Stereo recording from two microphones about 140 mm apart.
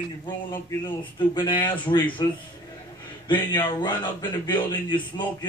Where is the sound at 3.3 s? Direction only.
35° left (ahead or behind).